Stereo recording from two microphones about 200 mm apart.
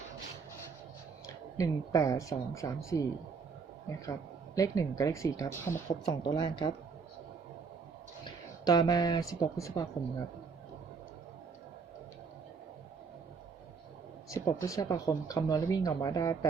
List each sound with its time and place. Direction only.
1.3 s speech: 15° left (ahead or behind)
4.5 s speech: 15° left (ahead or behind)
6.2 s speech: 25° left (ahead or behind)
8.2 s speech: 20° left (ahead or behind)
14.3 s speech: 15° left (ahead or behind)